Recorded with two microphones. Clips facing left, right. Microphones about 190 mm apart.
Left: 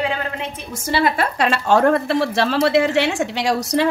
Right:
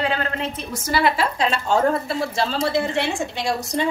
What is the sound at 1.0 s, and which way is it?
A woman's voice, 55° left (ahead or behind).